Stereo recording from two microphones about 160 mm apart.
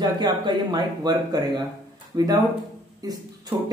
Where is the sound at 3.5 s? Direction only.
15° right (ahead or behind).